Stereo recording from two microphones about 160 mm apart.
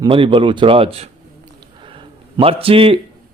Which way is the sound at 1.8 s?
30° right (ahead or behind).